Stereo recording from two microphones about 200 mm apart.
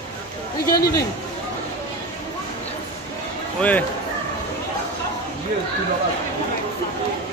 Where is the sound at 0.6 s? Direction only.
50° left (ahead or behind).